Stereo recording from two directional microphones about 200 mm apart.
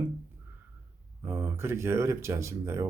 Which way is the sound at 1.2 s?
10° right (ahead or behind).